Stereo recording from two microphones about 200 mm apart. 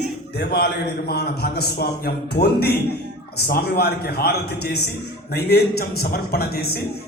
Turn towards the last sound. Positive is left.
turn(degrees=50)  # may be behind; listen again after turning